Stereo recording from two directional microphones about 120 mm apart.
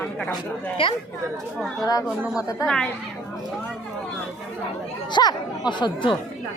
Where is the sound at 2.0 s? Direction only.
10° right (ahead or behind).